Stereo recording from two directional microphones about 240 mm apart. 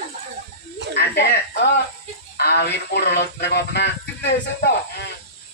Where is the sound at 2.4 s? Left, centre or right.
Left.